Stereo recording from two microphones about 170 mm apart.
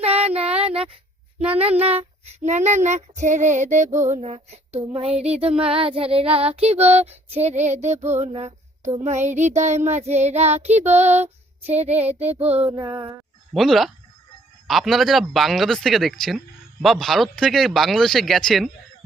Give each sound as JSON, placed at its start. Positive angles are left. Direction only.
{"t": 0.0, "sound": "child singing", "side_deg": -35}
{"t": 0.6, "sound": "a sound", "side_deg": -35}
{"t": 1.5, "sound": "child singing", "side_deg": -35}
{"t": 13.5, "sound": "speech", "side_deg": 0}